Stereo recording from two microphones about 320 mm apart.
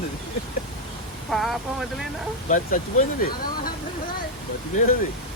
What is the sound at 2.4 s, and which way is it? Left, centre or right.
Speech, left.